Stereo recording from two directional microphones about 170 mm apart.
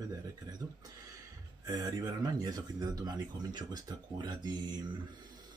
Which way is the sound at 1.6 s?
25° right (ahead or behind).